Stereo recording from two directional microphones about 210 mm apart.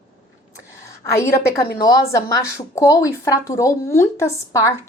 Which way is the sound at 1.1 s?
15° left (ahead or behind).